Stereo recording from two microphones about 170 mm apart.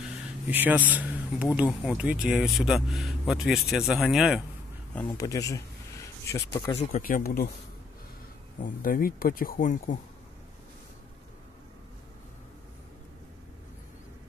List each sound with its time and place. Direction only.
0.5 s a man's voice: 10° right (ahead or behind)
4.9 s speech: 20° left (ahead or behind)
6.7 s speech: 45° left (ahead or behind)
8.5 s speech: 55° left (ahead or behind)